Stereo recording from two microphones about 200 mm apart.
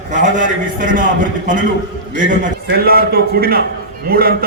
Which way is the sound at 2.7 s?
50° right (ahead or behind).